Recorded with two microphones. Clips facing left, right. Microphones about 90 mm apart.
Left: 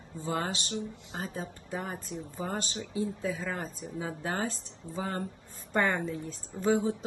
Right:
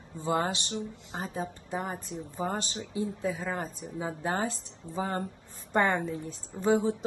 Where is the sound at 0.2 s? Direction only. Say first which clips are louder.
Right 4 dB; 25° right (ahead or behind).